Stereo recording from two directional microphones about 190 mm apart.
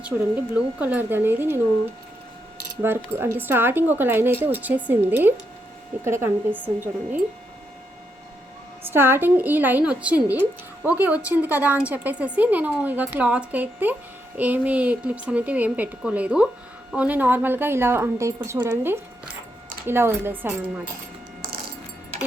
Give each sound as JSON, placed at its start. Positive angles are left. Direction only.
{"t": 0.0, "sound": "speech", "side_deg": -10}
{"t": 2.8, "sound": "speech", "side_deg": -10}
{"t": 8.9, "sound": "speech", "side_deg": -10}